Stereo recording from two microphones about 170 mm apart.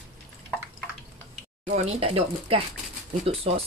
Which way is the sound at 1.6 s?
40° right (ahead or behind).